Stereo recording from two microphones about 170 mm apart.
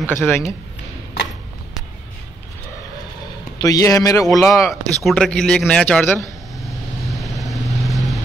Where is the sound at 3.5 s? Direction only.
20° left (ahead or behind).